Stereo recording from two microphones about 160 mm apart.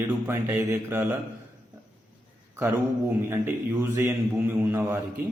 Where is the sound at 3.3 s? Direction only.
15° right (ahead or behind).